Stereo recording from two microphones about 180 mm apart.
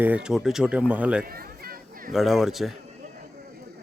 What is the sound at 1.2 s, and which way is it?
Chatter, 55° right (ahead or behind).